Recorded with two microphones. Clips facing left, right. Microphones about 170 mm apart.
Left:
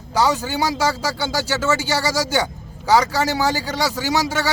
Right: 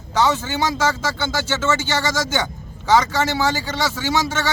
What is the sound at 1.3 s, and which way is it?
A man's voice, 35° left (ahead or behind).